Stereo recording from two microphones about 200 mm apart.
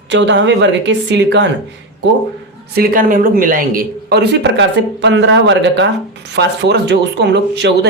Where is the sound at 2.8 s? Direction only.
45° right (ahead or behind).